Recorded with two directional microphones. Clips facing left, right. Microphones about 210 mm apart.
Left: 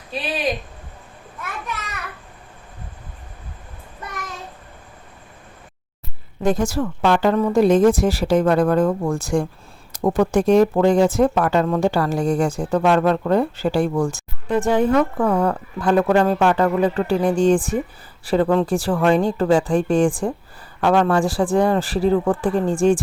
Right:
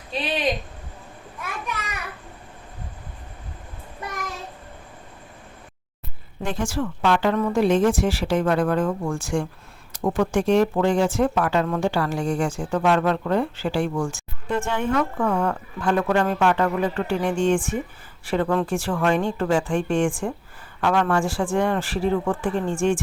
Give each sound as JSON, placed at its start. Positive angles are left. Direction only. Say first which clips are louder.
{"t": 6.4, "sound": "speech", "louder": "left 6 dB", "side_deg": 40}